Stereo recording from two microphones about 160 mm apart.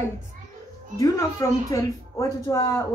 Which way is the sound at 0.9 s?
20° left (ahead or behind).